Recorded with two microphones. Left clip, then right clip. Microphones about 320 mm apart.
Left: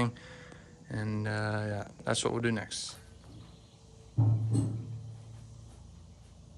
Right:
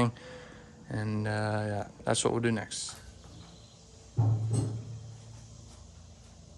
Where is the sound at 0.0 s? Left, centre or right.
Centre.